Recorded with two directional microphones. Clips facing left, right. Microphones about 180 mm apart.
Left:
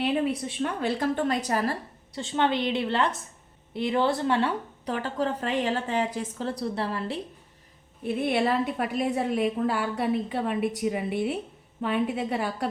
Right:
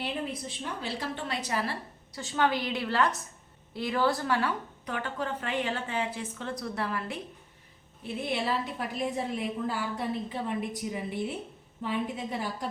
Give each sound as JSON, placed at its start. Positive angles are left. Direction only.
{"t": 0.0, "sound": "a woman's voice", "side_deg": 65}
{"t": 2.1, "sound": "a woman's voice", "side_deg": 25}
{"t": 8.0, "sound": "a woman's voice", "side_deg": 60}